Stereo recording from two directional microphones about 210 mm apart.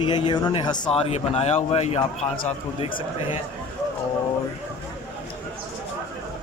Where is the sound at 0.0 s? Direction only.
20° left (ahead or behind).